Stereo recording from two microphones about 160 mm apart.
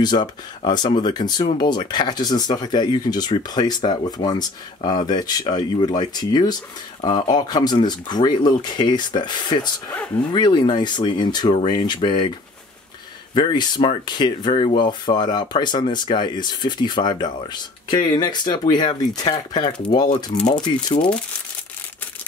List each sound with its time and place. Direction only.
0.0 s speech: 25° left (ahead or behind)
13.3 s speech: 30° left (ahead or behind)